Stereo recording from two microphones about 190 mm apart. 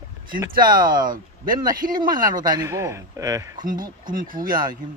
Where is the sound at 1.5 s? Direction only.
20° right (ahead or behind).